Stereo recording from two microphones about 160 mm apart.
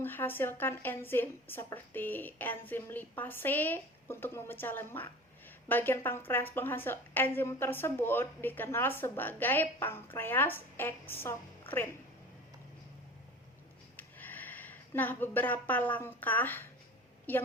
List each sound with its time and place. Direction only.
0.0 s a woman's voice: 15° left (ahead or behind)
13.9 s a woman's voice: 10° left (ahead or behind)